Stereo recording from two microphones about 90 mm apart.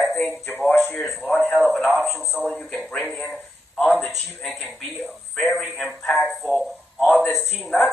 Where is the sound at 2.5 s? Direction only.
10° left (ahead or behind).